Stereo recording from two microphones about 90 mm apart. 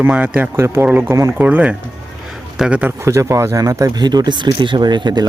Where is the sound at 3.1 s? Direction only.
35° right (ahead or behind).